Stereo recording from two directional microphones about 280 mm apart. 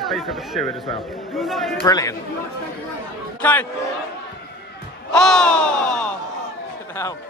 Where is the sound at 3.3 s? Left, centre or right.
Centre.